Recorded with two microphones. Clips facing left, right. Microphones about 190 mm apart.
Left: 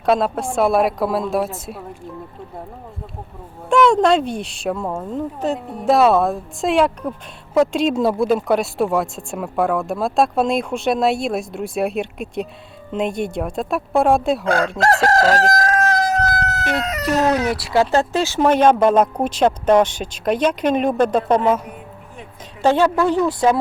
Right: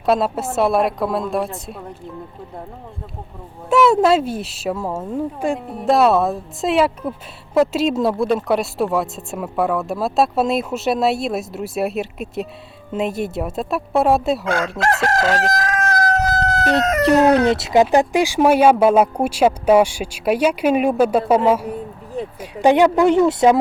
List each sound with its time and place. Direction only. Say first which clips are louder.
0.0 s speech: even; centre (ahead or behind)
3.7 s speech: even; 5° right (ahead or behind)
14.4 s speech: left 2 dB; 35° left (ahead or behind)
14.8 s crowing: left 3 dB; 40° left (ahead or behind)
16.3 s chicken: right 4 dB; 25° right (ahead or behind)
17.2 s speech: right 3 dB; 60° right (ahead or behind)
17.5 s speech: right 3 dB; 20° right (ahead or behind)